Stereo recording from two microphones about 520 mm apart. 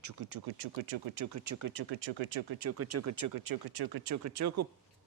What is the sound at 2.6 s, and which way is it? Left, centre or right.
Speech, right.